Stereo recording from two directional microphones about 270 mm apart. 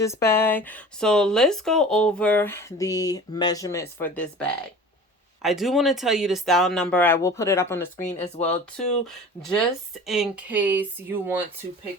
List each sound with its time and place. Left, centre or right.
0.0 s speech: centre
10.1 s speech: centre